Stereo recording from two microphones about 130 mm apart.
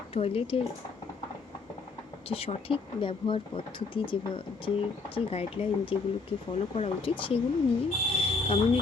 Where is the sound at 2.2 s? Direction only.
50° left (ahead or behind).